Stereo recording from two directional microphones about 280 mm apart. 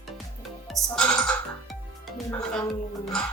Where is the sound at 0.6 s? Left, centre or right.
Centre.